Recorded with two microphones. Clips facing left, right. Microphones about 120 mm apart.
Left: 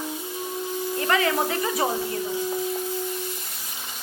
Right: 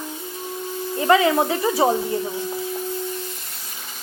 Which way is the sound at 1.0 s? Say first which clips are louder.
Right 7 dB; 20° right (ahead or behind).